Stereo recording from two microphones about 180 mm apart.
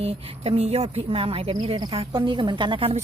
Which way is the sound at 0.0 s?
35° right (ahead or behind).